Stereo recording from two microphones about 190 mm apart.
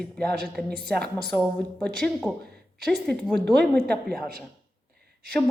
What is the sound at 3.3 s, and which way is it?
Speech, 60° right (ahead or behind).